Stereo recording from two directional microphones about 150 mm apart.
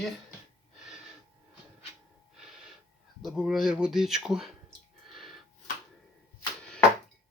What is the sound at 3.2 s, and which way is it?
Speech, centre (ahead or behind).